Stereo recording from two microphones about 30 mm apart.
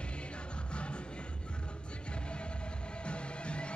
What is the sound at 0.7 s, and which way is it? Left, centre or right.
Music, left.